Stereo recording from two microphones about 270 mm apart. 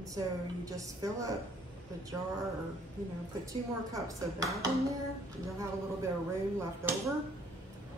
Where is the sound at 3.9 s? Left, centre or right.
Centre.